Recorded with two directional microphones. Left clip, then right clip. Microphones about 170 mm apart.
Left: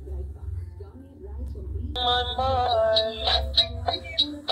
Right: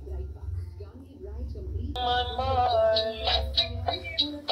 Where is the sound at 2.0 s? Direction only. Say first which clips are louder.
Left 3 dB; 25° left (ahead or behind).